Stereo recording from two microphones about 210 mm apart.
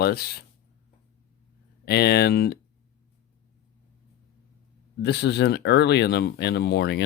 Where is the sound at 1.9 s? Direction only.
50° left (ahead or behind).